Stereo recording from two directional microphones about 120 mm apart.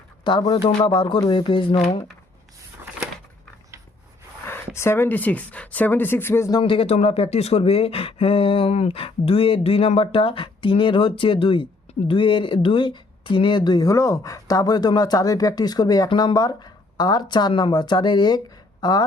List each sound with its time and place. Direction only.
0.3 s speech: 40° left (ahead or behind)
4.4 s speech: 20° left (ahead or behind)
6.5 s speech: 45° left (ahead or behind)